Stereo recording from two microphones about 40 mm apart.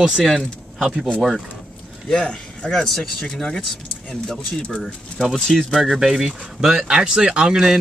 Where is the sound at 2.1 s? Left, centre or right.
Centre.